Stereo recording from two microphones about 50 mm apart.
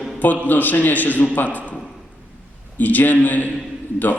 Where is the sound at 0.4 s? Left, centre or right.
Left.